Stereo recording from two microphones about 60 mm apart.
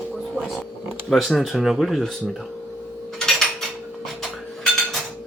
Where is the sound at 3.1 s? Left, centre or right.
Centre.